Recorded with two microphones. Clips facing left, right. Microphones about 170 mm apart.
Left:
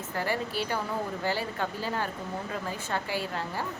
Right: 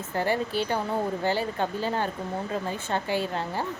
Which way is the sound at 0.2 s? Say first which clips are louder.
Right 5 dB; 25° right (ahead or behind).